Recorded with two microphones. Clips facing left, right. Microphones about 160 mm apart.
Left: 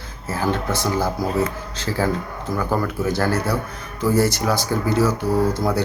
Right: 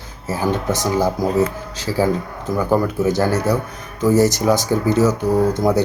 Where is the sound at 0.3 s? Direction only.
15° right (ahead or behind).